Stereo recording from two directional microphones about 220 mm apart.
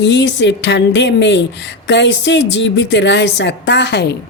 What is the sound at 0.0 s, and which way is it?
Speech, 55° left (ahead or behind).